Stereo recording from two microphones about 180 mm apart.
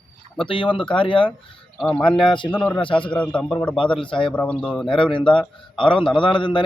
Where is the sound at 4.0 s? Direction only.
30° left (ahead or behind).